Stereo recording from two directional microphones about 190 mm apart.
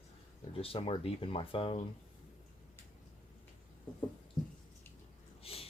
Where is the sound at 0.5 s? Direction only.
30° left (ahead or behind).